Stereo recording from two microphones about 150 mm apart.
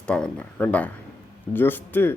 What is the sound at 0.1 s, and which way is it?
Speech, 5° left (ahead or behind).